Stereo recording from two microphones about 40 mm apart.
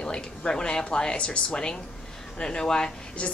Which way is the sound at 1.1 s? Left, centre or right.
Left.